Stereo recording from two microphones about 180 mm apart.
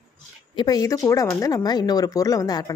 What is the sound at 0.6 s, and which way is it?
Speech, 20° left (ahead or behind).